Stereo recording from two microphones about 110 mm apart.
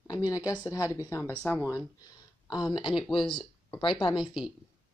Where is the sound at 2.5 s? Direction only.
40° left (ahead or behind).